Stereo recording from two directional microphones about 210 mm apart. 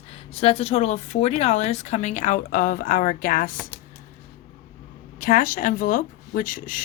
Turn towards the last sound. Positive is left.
turn(degrees=40)  # may be behind; listen again after turning